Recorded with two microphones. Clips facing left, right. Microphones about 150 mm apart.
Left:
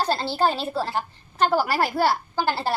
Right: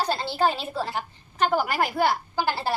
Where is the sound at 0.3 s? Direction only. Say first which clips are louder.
Left 1 dB; 35° left (ahead or behind).